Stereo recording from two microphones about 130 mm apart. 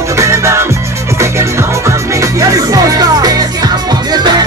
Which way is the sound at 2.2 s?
25° right (ahead or behind).